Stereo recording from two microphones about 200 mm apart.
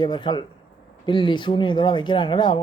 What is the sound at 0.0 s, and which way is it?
Speech, 25° left (ahead or behind).